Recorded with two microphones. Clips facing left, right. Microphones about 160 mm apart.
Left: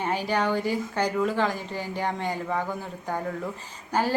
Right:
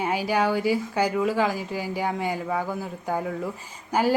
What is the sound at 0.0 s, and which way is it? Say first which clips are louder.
Speech: right 2 dB; 10° right (ahead or behind).